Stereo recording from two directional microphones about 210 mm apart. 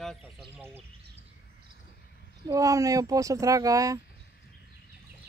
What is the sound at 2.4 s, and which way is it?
Speech, 15° right (ahead or behind).